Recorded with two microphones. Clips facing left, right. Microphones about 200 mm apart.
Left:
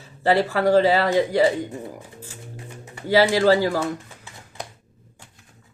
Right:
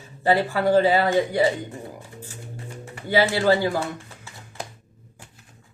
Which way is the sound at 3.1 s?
40° left (ahead or behind).